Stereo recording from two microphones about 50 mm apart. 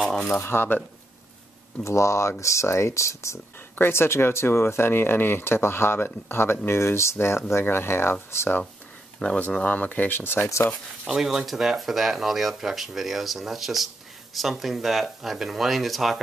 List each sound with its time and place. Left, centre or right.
0.3 s speech: left
1.8 s speech: left
3.9 s speech: left
7.6 s speech: left
9.2 s speech: left
11.1 s speech: centre